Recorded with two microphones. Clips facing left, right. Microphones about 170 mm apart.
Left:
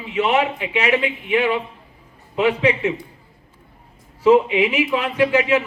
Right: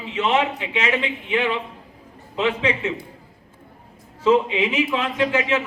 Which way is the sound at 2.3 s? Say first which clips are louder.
Left 4 dB; 15° left (ahead or behind).